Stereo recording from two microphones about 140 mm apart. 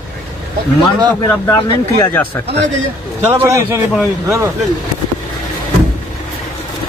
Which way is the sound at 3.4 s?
20° right (ahead or behind).